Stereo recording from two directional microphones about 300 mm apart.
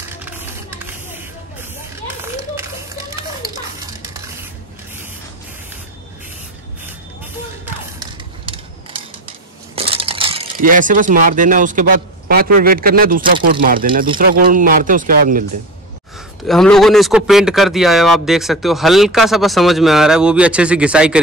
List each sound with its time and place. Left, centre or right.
7.6 s music: centre
9.8 s a sound: centre
12.3 s speech: right
16.4 s speech: centre